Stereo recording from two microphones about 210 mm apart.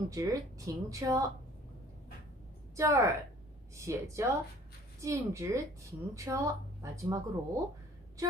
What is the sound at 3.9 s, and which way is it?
A woman's voice, 15° right (ahead or behind).